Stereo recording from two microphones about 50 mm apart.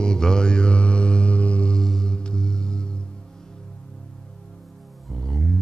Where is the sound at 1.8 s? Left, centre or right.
Centre.